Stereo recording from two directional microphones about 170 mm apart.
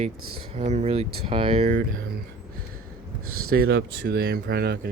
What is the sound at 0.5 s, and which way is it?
Speech, 40° right (ahead or behind).